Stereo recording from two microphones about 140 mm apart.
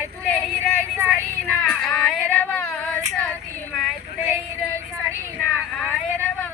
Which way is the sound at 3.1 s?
5° left (ahead or behind).